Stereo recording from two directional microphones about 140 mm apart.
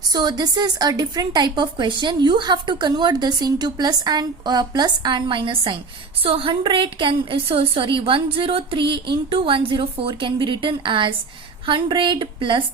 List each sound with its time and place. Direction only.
0.1 s speech: 30° right (ahead or behind)